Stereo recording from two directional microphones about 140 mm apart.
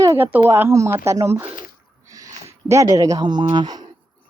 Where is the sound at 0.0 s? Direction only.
20° right (ahead or behind).